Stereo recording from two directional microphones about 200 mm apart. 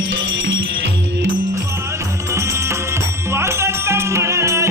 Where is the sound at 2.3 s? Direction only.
15° right (ahead or behind).